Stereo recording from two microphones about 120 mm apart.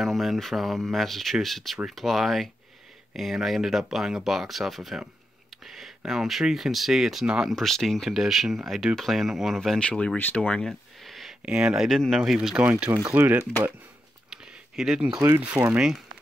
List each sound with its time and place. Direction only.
0.0 s speech: centre (ahead or behind)
12.9 s speech: 20° right (ahead or behind)
14.3 s a sound: 5° right (ahead or behind)
15.4 s speech: 15° right (ahead or behind)